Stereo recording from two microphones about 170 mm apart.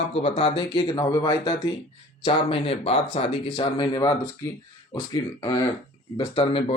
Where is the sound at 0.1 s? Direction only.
35° left (ahead or behind).